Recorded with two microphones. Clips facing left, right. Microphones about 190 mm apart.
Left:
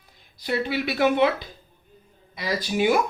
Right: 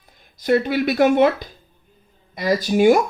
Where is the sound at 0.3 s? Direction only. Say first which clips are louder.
Right 8 dB; 45° right (ahead or behind).